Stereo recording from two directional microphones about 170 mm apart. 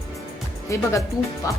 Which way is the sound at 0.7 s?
20° left (ahead or behind).